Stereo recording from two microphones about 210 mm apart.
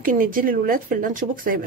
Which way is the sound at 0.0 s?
40° right (ahead or behind).